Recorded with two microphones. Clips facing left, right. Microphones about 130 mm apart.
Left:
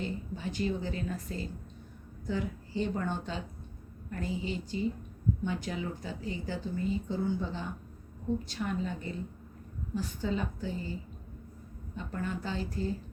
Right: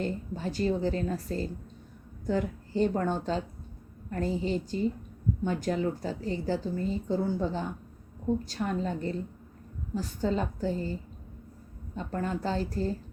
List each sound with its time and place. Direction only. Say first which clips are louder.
0.0 s a woman's voice: right 4 dB; 40° right (ahead or behind)
2.2 s a woman's voice: right 5 dB; 50° right (ahead or behind)
11.9 s a woman's voice: right 4 dB; 40° right (ahead or behind)